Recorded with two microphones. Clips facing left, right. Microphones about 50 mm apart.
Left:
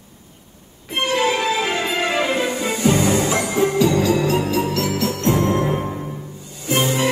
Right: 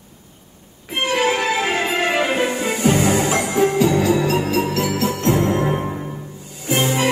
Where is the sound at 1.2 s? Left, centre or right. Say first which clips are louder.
Right 1 dB; right.